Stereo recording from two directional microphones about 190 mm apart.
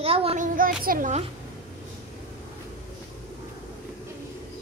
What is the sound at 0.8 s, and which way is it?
Speech, 45° right (ahead or behind).